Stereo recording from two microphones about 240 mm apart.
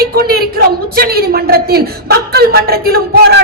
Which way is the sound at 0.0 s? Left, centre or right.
Right.